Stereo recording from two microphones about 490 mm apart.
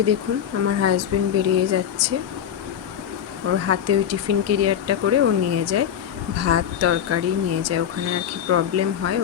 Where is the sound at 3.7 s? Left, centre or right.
Right.